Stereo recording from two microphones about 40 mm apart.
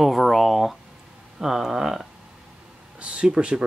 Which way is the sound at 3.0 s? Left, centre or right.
Right.